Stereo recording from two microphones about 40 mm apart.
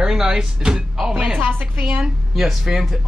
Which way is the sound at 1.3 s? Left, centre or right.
Right.